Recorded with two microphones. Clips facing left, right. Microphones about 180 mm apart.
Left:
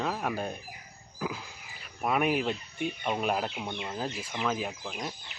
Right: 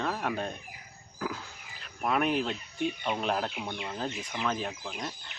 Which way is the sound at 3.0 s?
5° left (ahead or behind).